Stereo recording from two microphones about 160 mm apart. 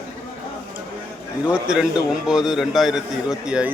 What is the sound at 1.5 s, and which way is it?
A man's voice, 5° right (ahead or behind).